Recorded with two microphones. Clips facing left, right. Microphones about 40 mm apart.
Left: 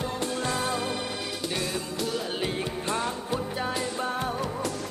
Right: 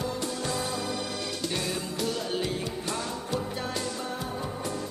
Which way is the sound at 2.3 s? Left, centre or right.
Left.